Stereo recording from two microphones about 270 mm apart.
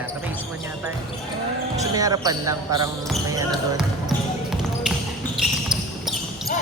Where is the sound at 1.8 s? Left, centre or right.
Centre.